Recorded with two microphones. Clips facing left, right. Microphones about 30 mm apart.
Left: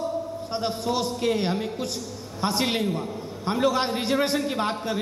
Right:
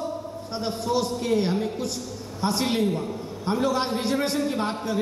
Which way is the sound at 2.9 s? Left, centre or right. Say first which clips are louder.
Right 1 dB; centre.